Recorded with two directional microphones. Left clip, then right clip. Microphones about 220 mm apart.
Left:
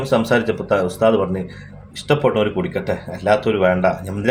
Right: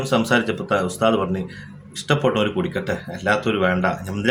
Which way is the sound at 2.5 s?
5° right (ahead or behind).